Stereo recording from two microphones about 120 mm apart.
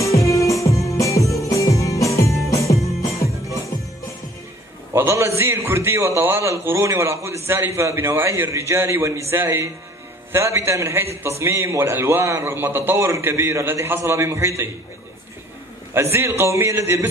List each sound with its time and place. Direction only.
0.3 s music: 25° left (ahead or behind)
4.9 s a man's voice: 20° right (ahead or behind)
15.9 s a man's voice: 20° right (ahead or behind)